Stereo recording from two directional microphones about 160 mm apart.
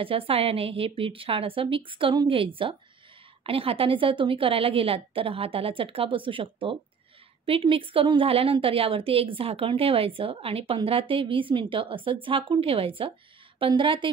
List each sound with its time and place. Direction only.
0.0 s a woman's voice: 35° right (ahead or behind)